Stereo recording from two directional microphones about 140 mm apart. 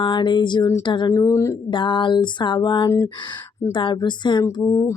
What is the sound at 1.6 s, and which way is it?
Speech, 35° left (ahead or behind).